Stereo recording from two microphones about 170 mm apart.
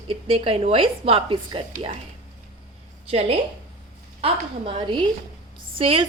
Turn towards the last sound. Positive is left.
turn(degrees=-35)  # may be behind; listen again after turning